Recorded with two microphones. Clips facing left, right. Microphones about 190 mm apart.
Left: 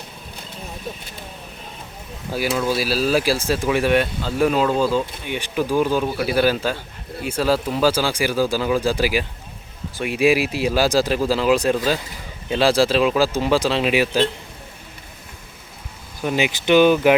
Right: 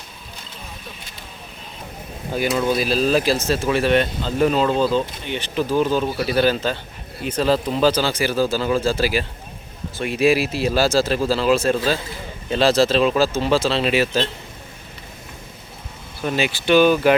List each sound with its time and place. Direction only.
2.3 s speech: 5° left (ahead or behind)
16.2 s speech: 15° left (ahead or behind)